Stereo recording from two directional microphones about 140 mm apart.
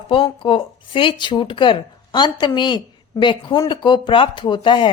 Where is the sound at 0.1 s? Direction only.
35° left (ahead or behind).